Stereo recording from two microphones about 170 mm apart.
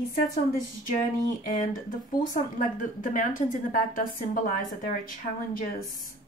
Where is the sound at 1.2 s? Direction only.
50° left (ahead or behind).